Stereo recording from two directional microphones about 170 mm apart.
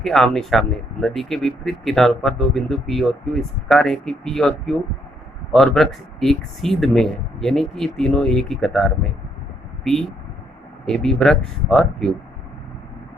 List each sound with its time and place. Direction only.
0.0 s speech: centre (ahead or behind)
10.8 s speech: 5° left (ahead or behind)